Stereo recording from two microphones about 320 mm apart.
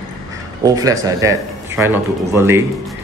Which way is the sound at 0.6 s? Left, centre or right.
Centre.